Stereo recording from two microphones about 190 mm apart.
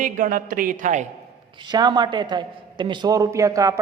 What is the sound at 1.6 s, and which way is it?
A woman's voice, 20° right (ahead or behind).